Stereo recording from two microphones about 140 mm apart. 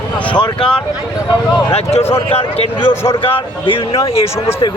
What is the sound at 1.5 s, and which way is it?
Speech, 45° left (ahead or behind).